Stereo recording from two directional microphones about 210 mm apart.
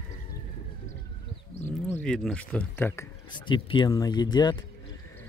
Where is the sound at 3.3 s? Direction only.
20° left (ahead or behind).